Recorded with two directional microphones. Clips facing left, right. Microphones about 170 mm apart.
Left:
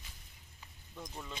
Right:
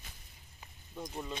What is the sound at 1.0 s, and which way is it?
Speech, 20° right (ahead or behind).